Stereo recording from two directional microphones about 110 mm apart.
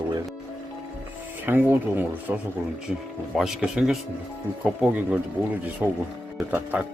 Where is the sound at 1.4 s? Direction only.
20° right (ahead or behind).